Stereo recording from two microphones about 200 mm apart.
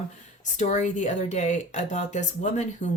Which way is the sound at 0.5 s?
35° left (ahead or behind).